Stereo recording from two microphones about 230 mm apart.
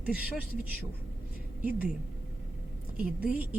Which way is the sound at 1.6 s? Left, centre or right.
Centre.